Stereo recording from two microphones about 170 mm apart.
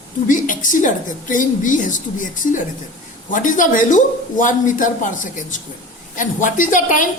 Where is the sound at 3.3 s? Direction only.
50° left (ahead or behind).